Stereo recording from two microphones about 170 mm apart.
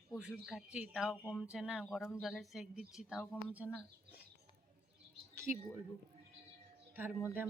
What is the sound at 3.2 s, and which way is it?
Speech, 10° left (ahead or behind).